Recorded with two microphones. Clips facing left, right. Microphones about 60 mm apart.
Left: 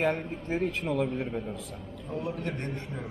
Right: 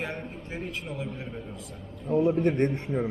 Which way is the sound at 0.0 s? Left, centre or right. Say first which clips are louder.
Left 6 dB; left.